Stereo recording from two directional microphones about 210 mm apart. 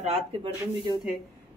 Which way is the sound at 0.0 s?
25° right (ahead or behind).